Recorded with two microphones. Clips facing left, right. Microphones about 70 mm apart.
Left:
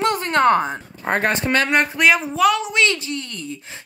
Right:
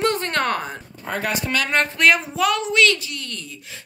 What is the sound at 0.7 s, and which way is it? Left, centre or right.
Speech, left.